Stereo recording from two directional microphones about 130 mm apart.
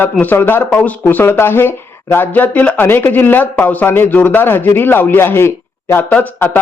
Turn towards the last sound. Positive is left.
turn(degrees=15)  # may be behind; listen again after turning